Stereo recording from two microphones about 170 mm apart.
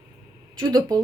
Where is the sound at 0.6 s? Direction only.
20° right (ahead or behind).